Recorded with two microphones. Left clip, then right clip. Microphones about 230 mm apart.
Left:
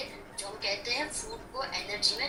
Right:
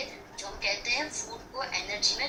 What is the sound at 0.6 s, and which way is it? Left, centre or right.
A woman's voice, centre.